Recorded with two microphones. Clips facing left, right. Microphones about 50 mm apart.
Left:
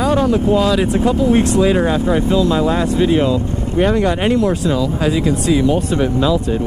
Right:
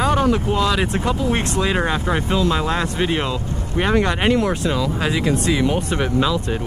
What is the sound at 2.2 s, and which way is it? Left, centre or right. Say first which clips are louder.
Speech: left 5 dB; right.